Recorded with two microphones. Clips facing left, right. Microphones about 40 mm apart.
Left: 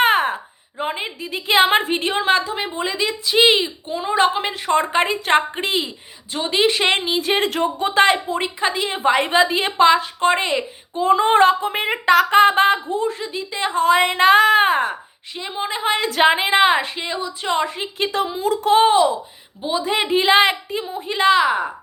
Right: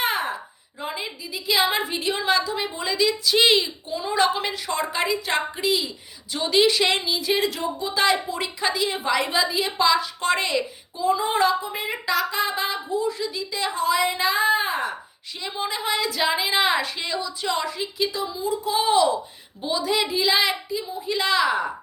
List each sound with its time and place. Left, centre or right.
0.0 s a sound: left
0.8 s a woman's voice: left
11.0 s speech: left
15.4 s a woman's voice: left
18.9 s a woman's voice: left
21.1 s a woman's voice: left